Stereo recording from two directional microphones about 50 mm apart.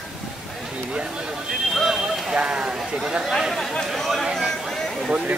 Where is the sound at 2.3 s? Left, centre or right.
Centre.